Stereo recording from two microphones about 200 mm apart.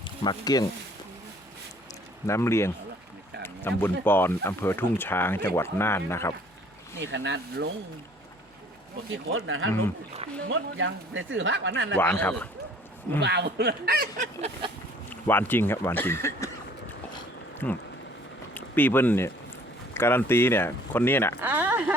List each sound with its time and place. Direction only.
0.0 s speech: 20° left (ahead or behind)
2.2 s speech: 15° left (ahead or behind)
3.4 s a sound: 10° left (ahead or behind)
4.0 s speech: 10° left (ahead or behind)
7.0 s speech: 65° right (ahead or behind)
9.3 s speech: 80° right
11.9 s speech: 10° left (ahead or behind)
13.1 s speech: 60° right (ahead or behind)
15.1 s speech: 10° left (ahead or behind)
17.6 s speech: 10° left (ahead or behind)
21.4 s speech: 10° right (ahead or behind)